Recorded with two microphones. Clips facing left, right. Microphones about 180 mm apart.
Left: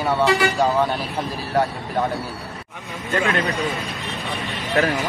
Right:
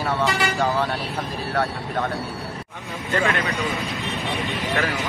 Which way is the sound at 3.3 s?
35° left (ahead or behind).